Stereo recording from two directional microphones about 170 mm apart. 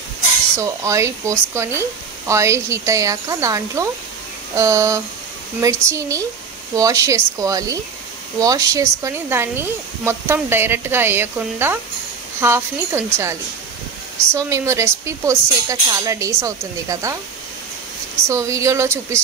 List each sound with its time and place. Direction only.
0.6 s speech: 15° right (ahead or behind)
18.2 s speech: 15° right (ahead or behind)